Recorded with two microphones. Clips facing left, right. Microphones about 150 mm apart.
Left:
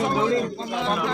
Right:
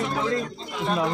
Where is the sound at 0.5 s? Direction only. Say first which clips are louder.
Left 4 dB; 65° left (ahead or behind).